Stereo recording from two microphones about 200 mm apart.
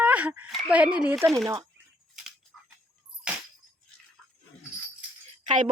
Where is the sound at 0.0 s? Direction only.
5° right (ahead or behind).